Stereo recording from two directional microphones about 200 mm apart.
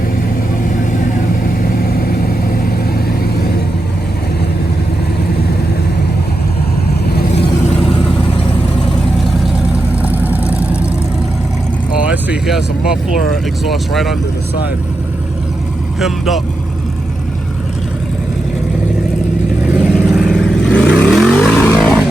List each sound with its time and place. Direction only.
1.5 s vehicle: 45° left (ahead or behind)
7.1 s vehicle: 50° left (ahead or behind)
7.4 s vehicle: 35° left (ahead or behind)
10.0 s vehicle: 10° right (ahead or behind)
12.1 s vehicle: 5° right (ahead or behind)
13.3 s speech: centre (ahead or behind)
16.0 s speech: centre (ahead or behind)
19.6 s vehicle: 5° right (ahead or behind)